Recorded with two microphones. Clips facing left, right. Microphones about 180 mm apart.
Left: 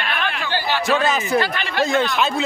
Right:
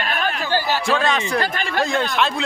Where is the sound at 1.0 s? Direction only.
5° left (ahead or behind).